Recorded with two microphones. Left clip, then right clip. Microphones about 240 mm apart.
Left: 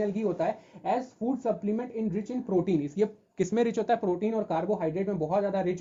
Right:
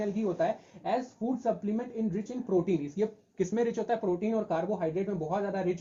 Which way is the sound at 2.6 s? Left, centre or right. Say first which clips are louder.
Left 3 dB; left.